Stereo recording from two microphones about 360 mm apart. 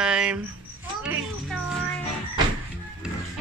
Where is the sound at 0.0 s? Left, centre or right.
Centre.